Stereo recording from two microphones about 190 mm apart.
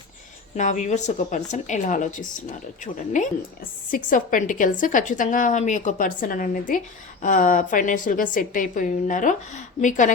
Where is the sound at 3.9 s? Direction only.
45° left (ahead or behind).